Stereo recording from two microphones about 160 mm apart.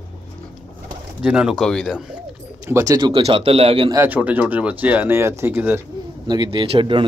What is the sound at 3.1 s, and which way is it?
Speech, 35° right (ahead or behind).